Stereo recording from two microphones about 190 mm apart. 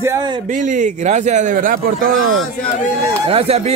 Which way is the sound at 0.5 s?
40° right (ahead or behind).